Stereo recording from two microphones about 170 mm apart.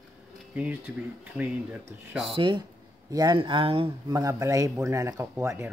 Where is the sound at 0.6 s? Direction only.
10° right (ahead or behind).